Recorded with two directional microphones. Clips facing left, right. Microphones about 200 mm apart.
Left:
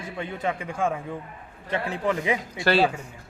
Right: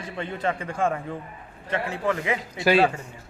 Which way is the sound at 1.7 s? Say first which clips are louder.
Even; 15° left (ahead or behind).